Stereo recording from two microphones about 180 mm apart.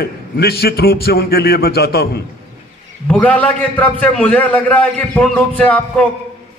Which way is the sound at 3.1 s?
5° left (ahead or behind).